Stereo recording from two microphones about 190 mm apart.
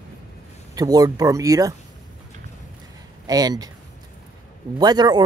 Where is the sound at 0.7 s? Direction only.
20° right (ahead or behind).